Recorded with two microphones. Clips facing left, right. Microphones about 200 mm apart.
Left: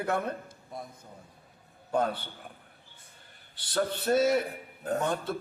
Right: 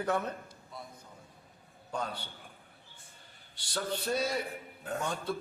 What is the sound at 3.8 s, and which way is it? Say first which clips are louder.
Speech: left 7 dB; 60° left (ahead or behind).